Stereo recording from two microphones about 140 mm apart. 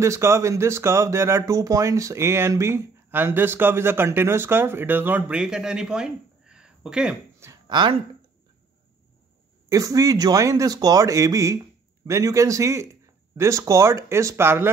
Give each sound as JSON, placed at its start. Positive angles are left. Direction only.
{"t": 0.0, "sound": "speech", "side_deg": -20}
{"t": 7.6, "sound": "speech", "side_deg": -35}
{"t": 9.7, "sound": "speech", "side_deg": -25}